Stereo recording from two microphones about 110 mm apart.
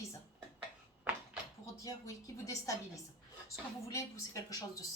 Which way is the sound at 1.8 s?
30° left (ahead or behind).